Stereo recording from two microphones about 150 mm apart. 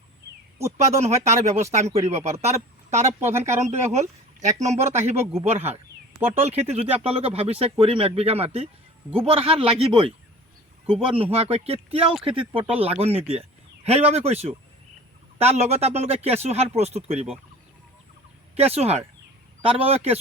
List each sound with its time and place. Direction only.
0.9 s speech: 50° right (ahead or behind)
3.2 s speech: 15° right (ahead or behind)
3.6 s speech: 50° right (ahead or behind)
11.1 s speech: 40° right (ahead or behind)
18.5 s speech: 40° right (ahead or behind)